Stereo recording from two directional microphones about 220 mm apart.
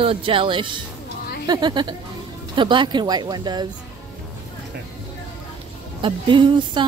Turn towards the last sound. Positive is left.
turn(degrees=-20)  # may be behind; listen again after turning